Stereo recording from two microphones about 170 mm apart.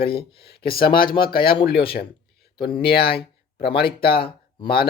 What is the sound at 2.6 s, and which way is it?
Speech, 70° left (ahead or behind).